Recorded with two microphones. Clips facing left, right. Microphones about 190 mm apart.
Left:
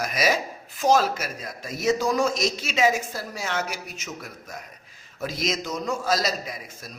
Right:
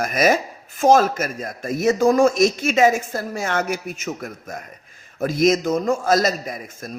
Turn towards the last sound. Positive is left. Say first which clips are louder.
# right 6 dB
turn(degrees=-50)  # may be behind; listen again after turning